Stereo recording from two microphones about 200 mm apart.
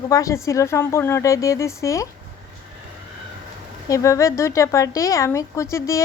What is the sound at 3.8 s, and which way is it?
Speech, 15° left (ahead or behind).